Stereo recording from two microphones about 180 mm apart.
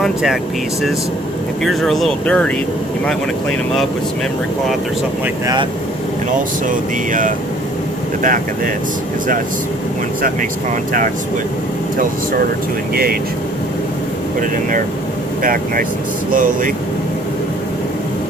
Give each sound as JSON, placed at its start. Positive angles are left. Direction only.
{"t": 0.0, "sound": "speech", "side_deg": 0}
{"t": 1.6, "sound": "speech", "side_deg": 0}
{"t": 6.7, "sound": "music", "side_deg": -45}
{"t": 12.9, "sound": "speech", "side_deg": -55}
{"t": 15.4, "sound": "music", "side_deg": -50}